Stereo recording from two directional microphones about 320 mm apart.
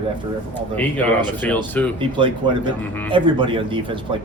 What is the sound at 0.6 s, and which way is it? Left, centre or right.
Speech, centre.